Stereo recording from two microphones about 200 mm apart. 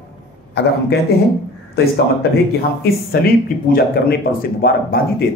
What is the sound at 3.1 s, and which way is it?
A man's voice, 50° left (ahead or behind).